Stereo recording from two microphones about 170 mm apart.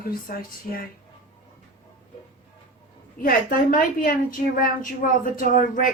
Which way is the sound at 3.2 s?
55° left (ahead or behind).